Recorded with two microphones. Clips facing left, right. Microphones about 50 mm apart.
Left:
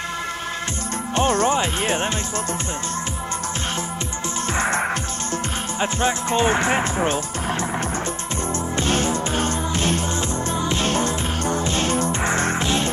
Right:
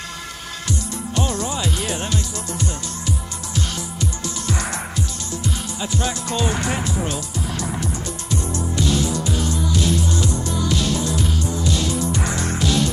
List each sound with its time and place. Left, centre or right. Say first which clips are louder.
1.1 s music: left 6 dB; left
4.5 s music: left 5 dB; left
5.3 s speech: left 3 dB; left
8.5 s music: left 1 dB; left